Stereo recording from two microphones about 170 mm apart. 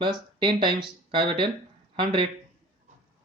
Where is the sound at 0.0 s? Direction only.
25° right (ahead or behind).